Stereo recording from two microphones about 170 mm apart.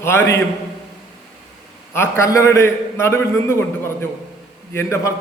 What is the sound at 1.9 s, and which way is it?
A man's voice, 15° left (ahead or behind).